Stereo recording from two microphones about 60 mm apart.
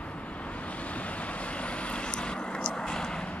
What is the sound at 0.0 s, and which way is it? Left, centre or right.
Vehicle, left.